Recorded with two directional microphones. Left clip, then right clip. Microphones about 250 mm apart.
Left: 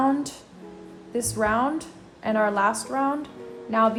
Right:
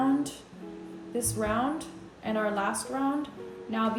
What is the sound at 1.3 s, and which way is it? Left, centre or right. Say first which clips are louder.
A woman's voice: left 7 dB; left.